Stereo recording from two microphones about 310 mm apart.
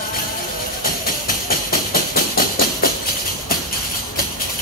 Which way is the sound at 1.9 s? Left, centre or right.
Left.